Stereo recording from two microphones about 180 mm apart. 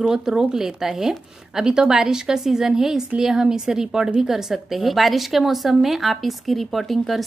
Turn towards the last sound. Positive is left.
turn(degrees=0)  # may be behind; listen again after turning